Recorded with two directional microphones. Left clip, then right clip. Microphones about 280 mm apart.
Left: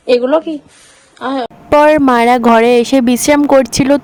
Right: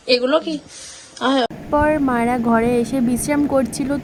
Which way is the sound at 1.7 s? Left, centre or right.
Left.